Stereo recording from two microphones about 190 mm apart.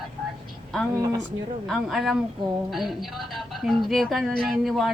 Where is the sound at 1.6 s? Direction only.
Centre (ahead or behind).